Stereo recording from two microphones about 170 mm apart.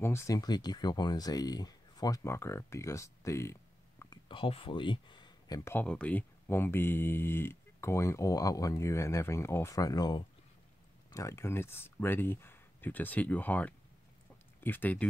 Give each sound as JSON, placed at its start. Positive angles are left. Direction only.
{"t": 0.0, "sound": "speech", "side_deg": 15}
{"t": 4.3, "sound": "speech", "side_deg": 30}
{"t": 5.6, "sound": "speech", "side_deg": 10}